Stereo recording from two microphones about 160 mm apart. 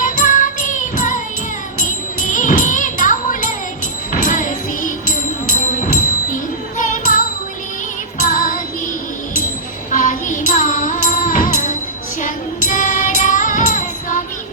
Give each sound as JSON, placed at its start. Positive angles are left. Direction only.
{"t": 0.0, "sound": "music", "side_deg": 55}
{"t": 9.9, "sound": "music", "side_deg": 55}